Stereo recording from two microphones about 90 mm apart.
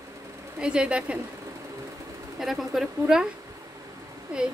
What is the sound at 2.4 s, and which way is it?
Speech, centre (ahead or behind).